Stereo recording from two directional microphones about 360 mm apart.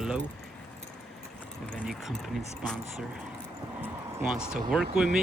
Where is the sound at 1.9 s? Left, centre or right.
Centre.